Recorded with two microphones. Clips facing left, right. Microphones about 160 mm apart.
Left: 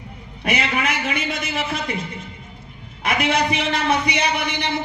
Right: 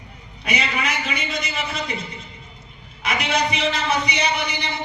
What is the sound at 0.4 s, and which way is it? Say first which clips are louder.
A man's voice: left 3 dB; 55° left (ahead or behind).